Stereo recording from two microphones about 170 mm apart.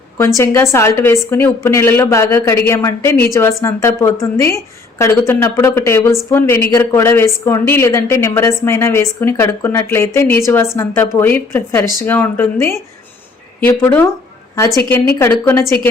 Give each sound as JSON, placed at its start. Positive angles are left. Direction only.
{"t": 0.3, "sound": "a woman's voice", "side_deg": 15}